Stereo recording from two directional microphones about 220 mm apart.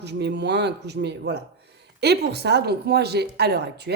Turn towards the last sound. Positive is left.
turn(degrees=-50)  # may be behind; listen again after turning